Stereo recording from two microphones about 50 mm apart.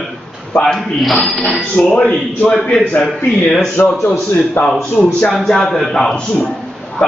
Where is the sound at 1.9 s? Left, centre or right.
Left.